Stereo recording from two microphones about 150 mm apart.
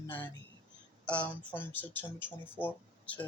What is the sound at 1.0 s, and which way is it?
Speech, 10° left (ahead or behind).